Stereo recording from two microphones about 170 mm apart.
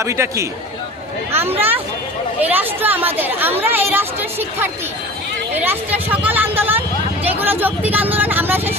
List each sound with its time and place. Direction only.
0.0 s speech: 15° right (ahead or behind)